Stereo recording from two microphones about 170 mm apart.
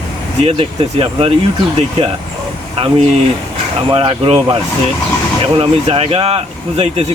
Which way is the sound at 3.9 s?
30° right (ahead or behind).